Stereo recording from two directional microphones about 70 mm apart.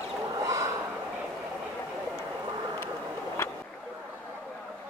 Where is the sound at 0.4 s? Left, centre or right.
Right.